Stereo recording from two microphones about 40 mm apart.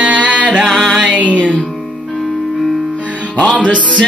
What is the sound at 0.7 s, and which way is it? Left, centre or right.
Music, centre.